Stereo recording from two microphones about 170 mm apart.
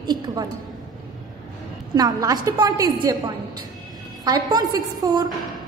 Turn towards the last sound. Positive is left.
turn(degrees=-20)  # may be behind; listen again after turning